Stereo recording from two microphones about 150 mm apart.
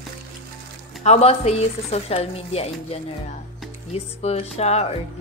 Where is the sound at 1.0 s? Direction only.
45° left (ahead or behind).